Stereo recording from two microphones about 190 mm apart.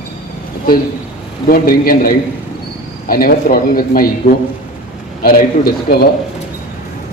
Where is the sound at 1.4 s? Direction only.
50° left (ahead or behind).